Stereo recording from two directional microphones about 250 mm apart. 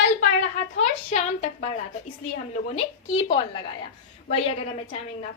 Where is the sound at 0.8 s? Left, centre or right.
Left.